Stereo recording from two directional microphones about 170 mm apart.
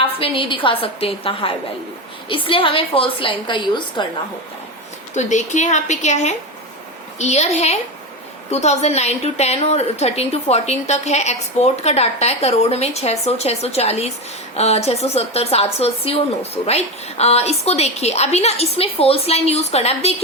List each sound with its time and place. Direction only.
0.2 s a woman's voice: 30° left (ahead or behind)
5.1 s a woman's voice: 45° left (ahead or behind)